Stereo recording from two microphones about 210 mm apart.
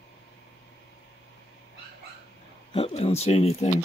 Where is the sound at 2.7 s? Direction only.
30° left (ahead or behind).